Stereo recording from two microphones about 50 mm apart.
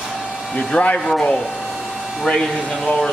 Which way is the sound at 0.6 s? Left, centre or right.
Left.